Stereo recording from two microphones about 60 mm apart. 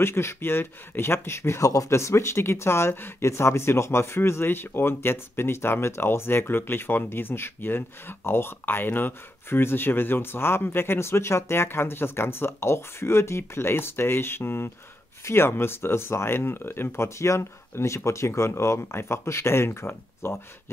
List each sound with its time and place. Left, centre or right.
0.0 s speech: left
1.7 s speech: left